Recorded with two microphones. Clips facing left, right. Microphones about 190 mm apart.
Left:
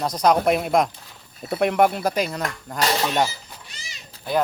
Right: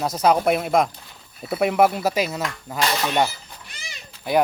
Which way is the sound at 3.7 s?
55° right (ahead or behind).